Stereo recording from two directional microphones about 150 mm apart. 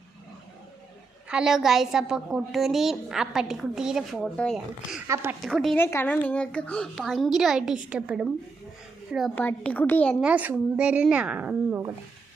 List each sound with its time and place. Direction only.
1.3 s a woman's voice: 5° right (ahead or behind)
5.0 s speech: 15° right (ahead or behind)
5.5 s a woman's voice: centre (ahead or behind)
5.7 s a woman's voice: 15° left (ahead or behind); by 8.3 s 5° right (ahead or behind)
9.3 s a woman's voice: 10° left (ahead or behind)
10.2 s speech: 10° right (ahead or behind)